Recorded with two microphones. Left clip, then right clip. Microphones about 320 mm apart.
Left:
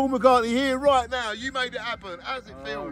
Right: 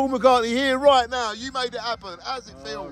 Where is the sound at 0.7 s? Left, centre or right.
Right.